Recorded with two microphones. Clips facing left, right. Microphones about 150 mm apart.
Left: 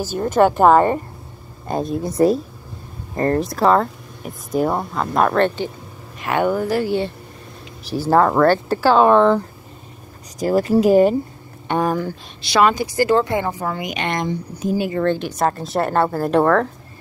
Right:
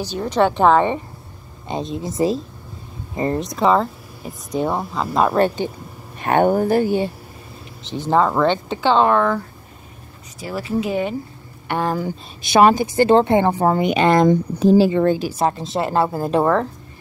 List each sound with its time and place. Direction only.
0.2 s speech: 5° left (ahead or behind); by 5.7 s 10° right (ahead or behind)
6.2 s speech: 45° right (ahead or behind)
6.8 s speech: 15° right (ahead or behind)
8.1 s speech: 5° left (ahead or behind)
9.1 s speech: 20° left (ahead or behind)
10.4 s speech: 45° left (ahead or behind)
11.6 s speech: 15° left (ahead or behind)
12.9 s speech: 25° right (ahead or behind)
14.2 s speech: 50° right (ahead or behind)
14.6 s speech: 30° right (ahead or behind)
15.0 s speech: 10° right (ahead or behind)